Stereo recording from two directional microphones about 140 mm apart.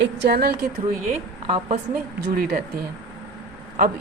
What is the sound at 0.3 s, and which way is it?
Speech, 90° right.